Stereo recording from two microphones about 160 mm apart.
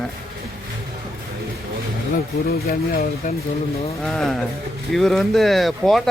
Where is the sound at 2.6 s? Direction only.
70° left (ahead or behind).